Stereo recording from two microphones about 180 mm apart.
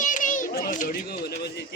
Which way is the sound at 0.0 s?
45° left (ahead or behind).